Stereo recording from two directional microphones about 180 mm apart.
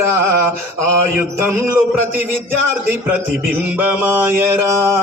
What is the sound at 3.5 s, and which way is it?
A man's voice, 10° right (ahead or behind).